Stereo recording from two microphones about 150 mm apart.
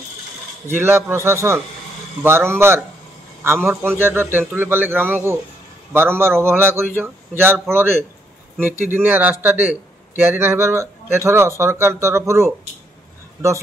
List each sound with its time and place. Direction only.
0.7 s a man's voice: 15° right (ahead or behind)